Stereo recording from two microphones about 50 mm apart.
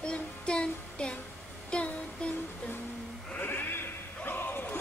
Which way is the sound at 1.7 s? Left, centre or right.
Left.